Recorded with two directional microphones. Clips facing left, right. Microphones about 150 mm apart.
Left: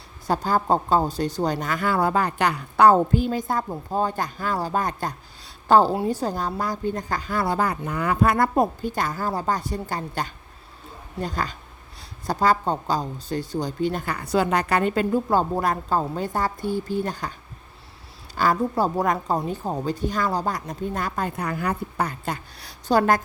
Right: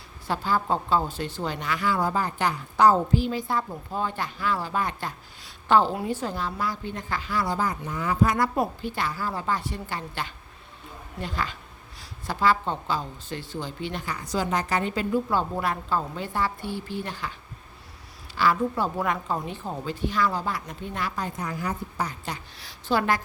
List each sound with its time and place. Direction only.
0.3 s a woman's voice: 45° left (ahead or behind)
18.3 s speech: 40° left (ahead or behind)
22.9 s speech: 45° left (ahead or behind)